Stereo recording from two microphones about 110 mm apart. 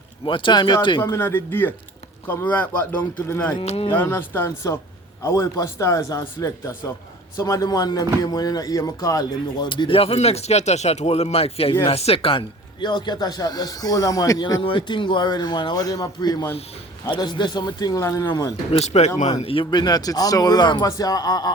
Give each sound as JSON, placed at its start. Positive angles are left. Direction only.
{"t": 0.3, "sound": "speech", "side_deg": 50}
{"t": 1.1, "sound": "a man's voice", "side_deg": 20}
{"t": 3.6, "sound": "speech", "side_deg": 65}
{"t": 3.9, "sound": "a man's voice", "side_deg": 20}
{"t": 9.6, "sound": "a man's voice", "side_deg": 50}
{"t": 18.7, "sound": "speech", "side_deg": 80}
{"t": 19.4, "sound": "speech", "side_deg": 55}
{"t": 19.7, "sound": "a man's voice", "side_deg": 40}